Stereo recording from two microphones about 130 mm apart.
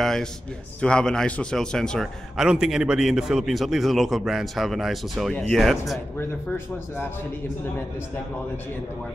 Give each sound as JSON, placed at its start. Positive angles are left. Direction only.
{"t": 0.0, "sound": "a sound", "side_deg": 5}
{"t": 0.7, "sound": "a man's voice", "side_deg": 5}
{"t": 6.1, "sound": "speech", "side_deg": 20}